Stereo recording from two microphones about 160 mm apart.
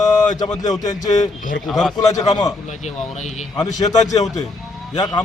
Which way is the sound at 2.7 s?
45° left (ahead or behind).